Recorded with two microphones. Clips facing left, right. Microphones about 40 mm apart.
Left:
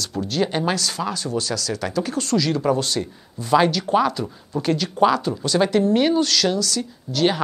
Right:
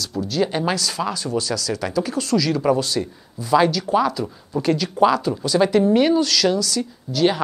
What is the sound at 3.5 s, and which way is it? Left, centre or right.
Speech, centre.